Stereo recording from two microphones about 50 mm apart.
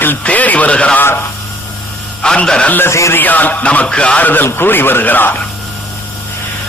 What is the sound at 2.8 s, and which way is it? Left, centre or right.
Speech, left.